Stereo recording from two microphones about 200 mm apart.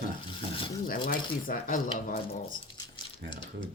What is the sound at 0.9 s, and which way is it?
Speech, 45° left (ahead or behind).